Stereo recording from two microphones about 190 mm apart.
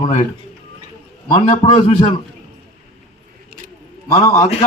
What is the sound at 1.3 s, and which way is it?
Speech, 25° left (ahead or behind).